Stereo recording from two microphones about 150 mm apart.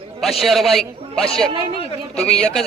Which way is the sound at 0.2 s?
Centre (ahead or behind).